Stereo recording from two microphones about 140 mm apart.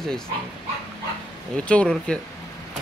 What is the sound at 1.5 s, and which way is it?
Speech, 10° left (ahead or behind).